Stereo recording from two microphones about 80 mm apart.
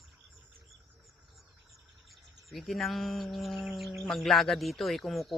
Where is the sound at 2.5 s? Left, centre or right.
Centre.